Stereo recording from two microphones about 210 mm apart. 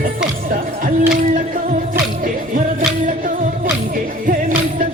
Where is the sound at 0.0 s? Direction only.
40° right (ahead or behind).